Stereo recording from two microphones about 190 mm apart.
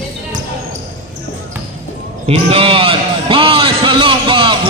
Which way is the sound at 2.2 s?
30° right (ahead or behind).